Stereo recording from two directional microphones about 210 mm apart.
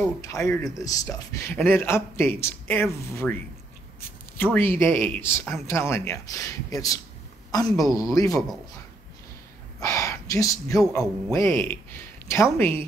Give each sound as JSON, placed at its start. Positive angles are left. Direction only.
{"t": 0.7, "sound": "a man's voice", "side_deg": 15}
{"t": 4.4, "sound": "a man's voice", "side_deg": 10}
{"t": 9.8, "sound": "a man's voice", "side_deg": 15}